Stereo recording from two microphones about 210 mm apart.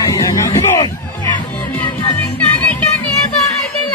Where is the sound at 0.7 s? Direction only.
15° left (ahead or behind).